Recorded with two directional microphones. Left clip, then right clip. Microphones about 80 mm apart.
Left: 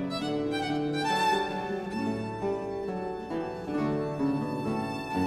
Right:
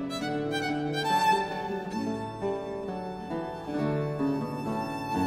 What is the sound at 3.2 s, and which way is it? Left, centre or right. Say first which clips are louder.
Music: left 1 dB; centre.